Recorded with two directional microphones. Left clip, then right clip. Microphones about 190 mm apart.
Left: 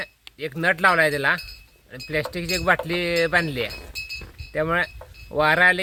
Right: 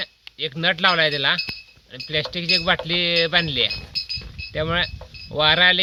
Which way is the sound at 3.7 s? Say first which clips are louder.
Right 7 dB; 45° left (ahead or behind).